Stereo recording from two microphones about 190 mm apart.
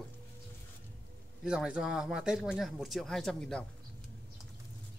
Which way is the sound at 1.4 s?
5° right (ahead or behind).